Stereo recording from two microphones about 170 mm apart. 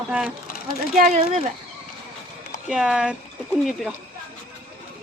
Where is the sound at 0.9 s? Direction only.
45° right (ahead or behind).